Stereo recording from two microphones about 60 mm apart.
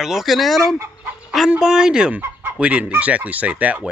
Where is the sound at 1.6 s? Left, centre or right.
Centre.